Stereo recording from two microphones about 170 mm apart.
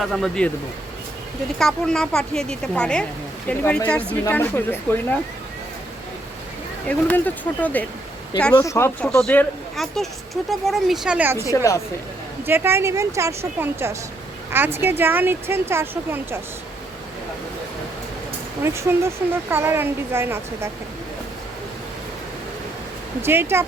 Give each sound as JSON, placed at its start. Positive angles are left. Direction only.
{"t": 0.0, "sound": "speech", "side_deg": 0}
{"t": 1.5, "sound": "speech", "side_deg": 5}
{"t": 4.3, "sound": "speech", "side_deg": 10}
{"t": 6.8, "sound": "speech", "side_deg": 10}
{"t": 11.5, "sound": "a woman's voice", "side_deg": 20}
{"t": 12.5, "sound": "speech", "side_deg": -15}
{"t": 18.6, "sound": "speech", "side_deg": -15}
{"t": 23.2, "sound": "speech", "side_deg": -15}